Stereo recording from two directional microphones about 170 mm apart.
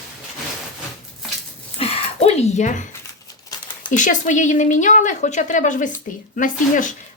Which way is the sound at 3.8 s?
50° left (ahead or behind).